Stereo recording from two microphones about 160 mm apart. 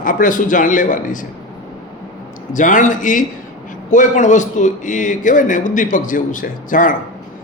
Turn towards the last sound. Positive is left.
turn(degrees=55)  # may be behind; listen again after turning